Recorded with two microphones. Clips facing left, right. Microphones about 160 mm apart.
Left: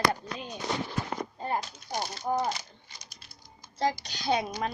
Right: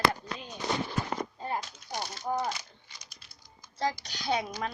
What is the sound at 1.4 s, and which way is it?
Speech, 40° left (ahead or behind).